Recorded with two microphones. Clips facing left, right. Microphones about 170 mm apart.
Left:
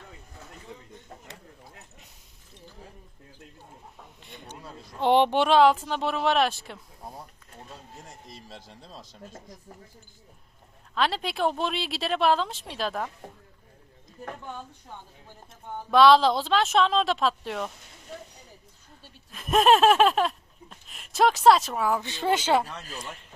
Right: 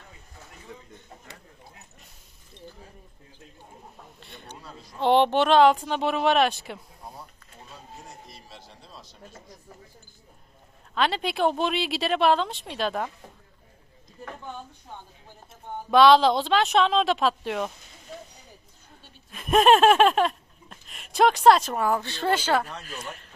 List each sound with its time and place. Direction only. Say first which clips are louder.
4.2 s speech: left 2 dB; 15° left (ahead or behind)
8.6 s speech: left 2 dB; 90° left
10.9 s speech: right 2 dB; centre (ahead or behind)
15.9 s speech: right 1 dB; centre (ahead or behind)
19.3 s a sound: right 2 dB; centre (ahead or behind)
22.0 s speech: even; 15° left (ahead or behind)
22.8 s speech: right 1 dB; 35° left (ahead or behind)